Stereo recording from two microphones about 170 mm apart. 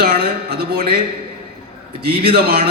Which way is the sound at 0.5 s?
65° right (ahead or behind).